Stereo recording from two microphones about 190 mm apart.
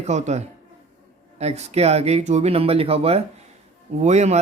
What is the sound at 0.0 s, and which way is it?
Speech, 35° right (ahead or behind).